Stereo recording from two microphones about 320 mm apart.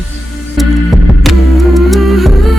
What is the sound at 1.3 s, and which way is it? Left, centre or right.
Vehicle, centre.